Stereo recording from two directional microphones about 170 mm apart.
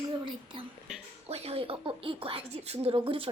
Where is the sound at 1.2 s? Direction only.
40° right (ahead or behind).